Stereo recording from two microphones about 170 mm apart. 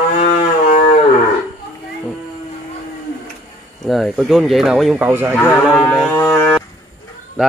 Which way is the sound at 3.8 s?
Centre (ahead or behind).